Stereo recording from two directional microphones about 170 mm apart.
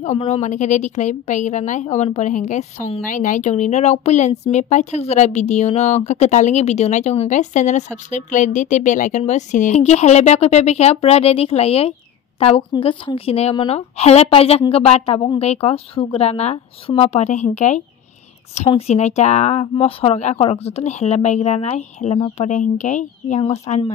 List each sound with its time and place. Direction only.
0.0 s a woman's voice: 40° left (ahead or behind)